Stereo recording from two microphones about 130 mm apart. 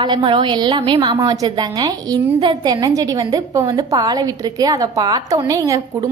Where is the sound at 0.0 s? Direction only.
35° right (ahead or behind).